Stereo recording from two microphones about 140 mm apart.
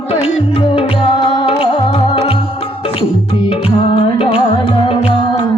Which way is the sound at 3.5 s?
40° left (ahead or behind).